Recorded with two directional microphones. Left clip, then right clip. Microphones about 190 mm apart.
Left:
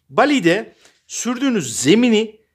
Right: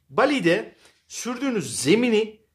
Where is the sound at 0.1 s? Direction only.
50° left (ahead or behind).